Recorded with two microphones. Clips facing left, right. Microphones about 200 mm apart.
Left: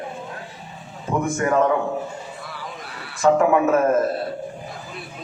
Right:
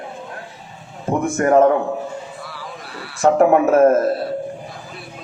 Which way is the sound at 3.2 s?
50° right (ahead or behind).